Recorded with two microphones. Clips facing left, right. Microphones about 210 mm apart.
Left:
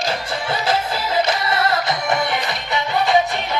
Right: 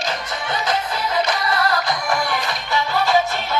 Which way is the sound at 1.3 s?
25° left (ahead or behind).